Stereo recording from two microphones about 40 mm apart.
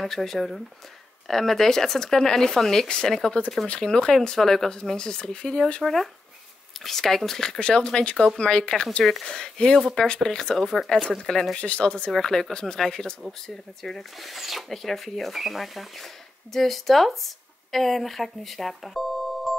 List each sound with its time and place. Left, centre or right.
0.0 s speech: centre
4.4 s speech: centre
4.9 s speech: left
5.8 s speech: centre
6.8 s speech: centre
7.6 s speech: left
9.0 s speech: centre
9.3 s speech: left
11.5 s speech: left
12.1 s speech: centre
14.2 s speech: centre